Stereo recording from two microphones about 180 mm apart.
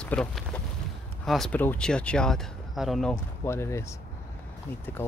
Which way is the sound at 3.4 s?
15° left (ahead or behind).